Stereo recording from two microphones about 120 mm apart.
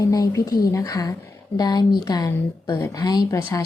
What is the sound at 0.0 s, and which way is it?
A woman's voice, 25° left (ahead or behind).